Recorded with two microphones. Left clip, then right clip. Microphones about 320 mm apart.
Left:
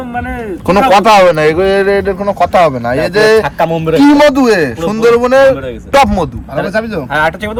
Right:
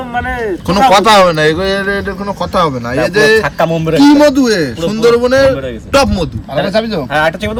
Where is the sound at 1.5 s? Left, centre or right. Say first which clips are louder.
Left 4 dB; centre.